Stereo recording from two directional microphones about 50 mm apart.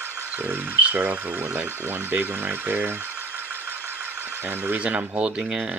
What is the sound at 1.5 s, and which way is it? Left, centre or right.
Speech, right.